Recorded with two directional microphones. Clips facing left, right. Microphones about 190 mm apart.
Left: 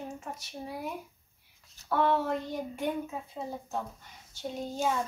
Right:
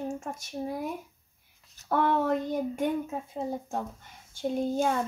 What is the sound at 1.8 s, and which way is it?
Speech, 50° right (ahead or behind).